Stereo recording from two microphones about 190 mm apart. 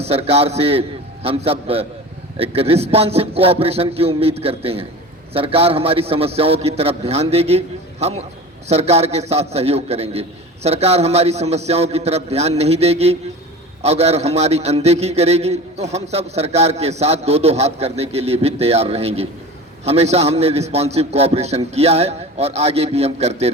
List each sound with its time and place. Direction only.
0.0 s a man's voice: 30° right (ahead or behind)